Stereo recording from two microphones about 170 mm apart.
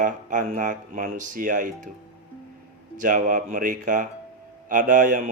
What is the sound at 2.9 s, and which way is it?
Speech, 50° right (ahead or behind).